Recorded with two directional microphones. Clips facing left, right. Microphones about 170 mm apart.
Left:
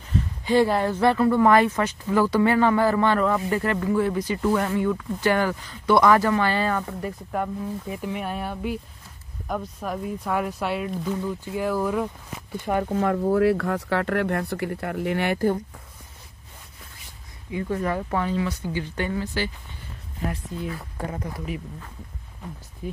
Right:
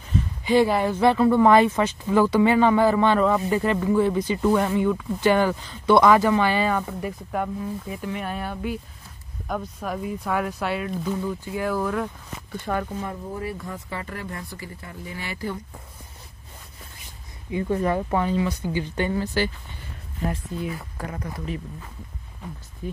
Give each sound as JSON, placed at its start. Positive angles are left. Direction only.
{"t": 0.5, "sound": "speech", "side_deg": -10}
{"t": 12.8, "sound": "speech", "side_deg": 70}
{"t": 17.5, "sound": "speech", "side_deg": -25}
{"t": 19.1, "sound": "speech", "side_deg": -40}